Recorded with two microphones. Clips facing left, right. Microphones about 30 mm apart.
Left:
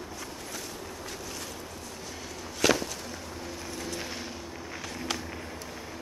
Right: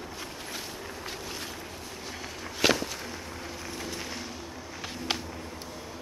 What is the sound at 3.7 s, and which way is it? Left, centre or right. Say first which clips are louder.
Vehicle: left 1 dB; centre.